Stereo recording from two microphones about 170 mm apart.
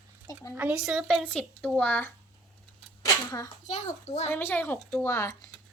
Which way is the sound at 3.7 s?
40° left (ahead or behind).